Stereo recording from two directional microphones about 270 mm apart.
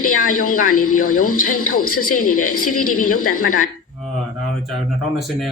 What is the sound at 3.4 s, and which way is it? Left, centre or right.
Speech, left.